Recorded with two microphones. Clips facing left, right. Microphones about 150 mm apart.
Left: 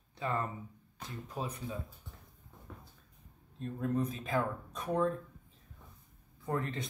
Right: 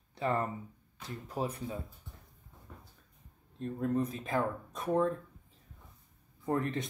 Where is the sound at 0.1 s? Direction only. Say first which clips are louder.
Right 3 dB; 25° right (ahead or behind).